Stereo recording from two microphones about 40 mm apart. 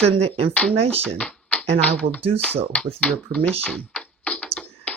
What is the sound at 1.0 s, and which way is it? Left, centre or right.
Speech, left.